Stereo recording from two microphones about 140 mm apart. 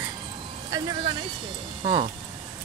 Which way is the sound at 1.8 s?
40° right (ahead or behind).